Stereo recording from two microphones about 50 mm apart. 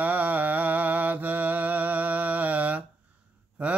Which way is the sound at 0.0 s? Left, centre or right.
Right.